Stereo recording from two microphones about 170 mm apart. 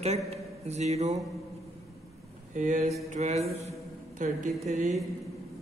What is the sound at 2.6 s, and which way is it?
Mantra, 50° right (ahead or behind).